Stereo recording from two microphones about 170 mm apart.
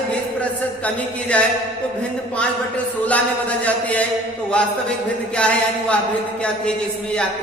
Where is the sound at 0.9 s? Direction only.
5° left (ahead or behind).